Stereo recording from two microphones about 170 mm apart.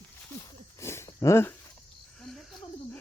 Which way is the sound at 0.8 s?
15° left (ahead or behind).